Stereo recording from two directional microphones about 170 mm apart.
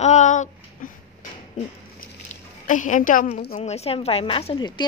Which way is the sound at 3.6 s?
40° left (ahead or behind).